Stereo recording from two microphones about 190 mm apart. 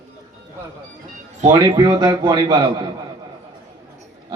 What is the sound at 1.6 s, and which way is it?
Speech, 20° right (ahead or behind).